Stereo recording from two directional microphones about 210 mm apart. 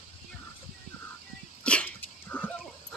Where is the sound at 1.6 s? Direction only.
5° left (ahead or behind).